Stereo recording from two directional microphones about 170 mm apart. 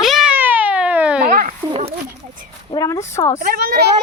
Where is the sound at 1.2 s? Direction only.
55° right (ahead or behind).